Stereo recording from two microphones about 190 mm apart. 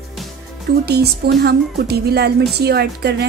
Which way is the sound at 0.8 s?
60° right (ahead or behind).